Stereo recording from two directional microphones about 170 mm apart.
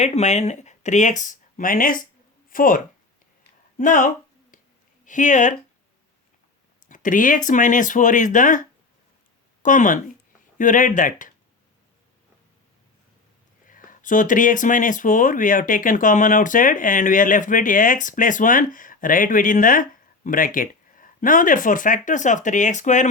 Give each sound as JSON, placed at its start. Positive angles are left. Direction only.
{"t": 0.0, "sound": "speech", "side_deg": 40}
{"t": 6.8, "sound": "speech", "side_deg": 50}
{"t": 9.6, "sound": "speech", "side_deg": 50}
{"t": 13.7, "sound": "speech", "side_deg": 50}